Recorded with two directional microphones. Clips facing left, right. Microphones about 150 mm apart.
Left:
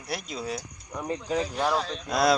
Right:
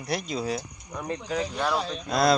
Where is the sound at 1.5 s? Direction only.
10° left (ahead or behind).